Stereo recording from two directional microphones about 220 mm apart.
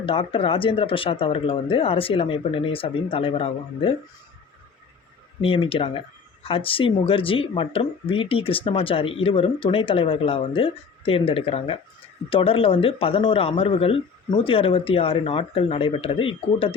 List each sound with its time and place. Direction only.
0.0 s speech: 25° left (ahead or behind)
5.4 s speech: 25° left (ahead or behind)